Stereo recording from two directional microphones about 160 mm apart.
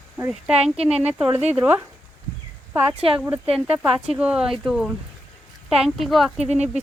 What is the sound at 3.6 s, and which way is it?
Speech, 5° right (ahead or behind).